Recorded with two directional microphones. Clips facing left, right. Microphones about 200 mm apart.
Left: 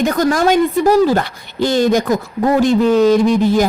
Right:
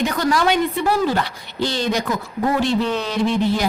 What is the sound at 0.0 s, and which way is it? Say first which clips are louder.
A woman's voice: left 5 dB; 45° left (ahead or behind).